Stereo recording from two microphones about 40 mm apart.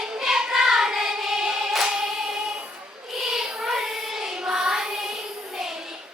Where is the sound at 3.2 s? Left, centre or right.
Centre.